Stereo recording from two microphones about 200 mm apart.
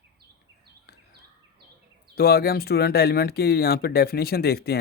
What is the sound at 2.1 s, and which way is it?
Speech, 50° left (ahead or behind).